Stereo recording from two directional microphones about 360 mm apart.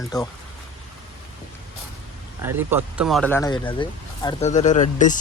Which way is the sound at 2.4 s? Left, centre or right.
Centre.